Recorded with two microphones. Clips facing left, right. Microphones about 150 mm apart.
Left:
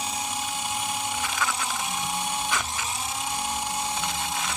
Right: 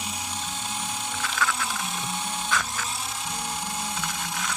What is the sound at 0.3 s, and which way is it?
Dental drill, 15° left (ahead or behind).